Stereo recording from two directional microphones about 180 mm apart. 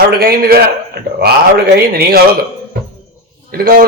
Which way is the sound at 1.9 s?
60° right (ahead or behind).